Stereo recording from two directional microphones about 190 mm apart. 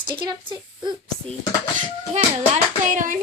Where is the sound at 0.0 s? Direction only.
25° right (ahead or behind).